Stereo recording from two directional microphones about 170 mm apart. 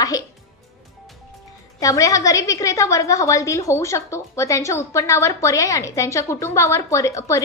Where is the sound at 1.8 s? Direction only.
20° left (ahead or behind).